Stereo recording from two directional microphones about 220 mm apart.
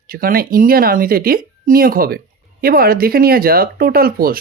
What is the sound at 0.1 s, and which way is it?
Speech, 40° right (ahead or behind).